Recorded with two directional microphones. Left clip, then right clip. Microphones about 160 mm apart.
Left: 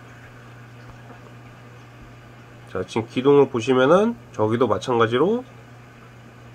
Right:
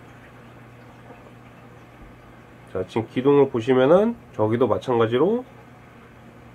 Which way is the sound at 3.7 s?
20° left (ahead or behind).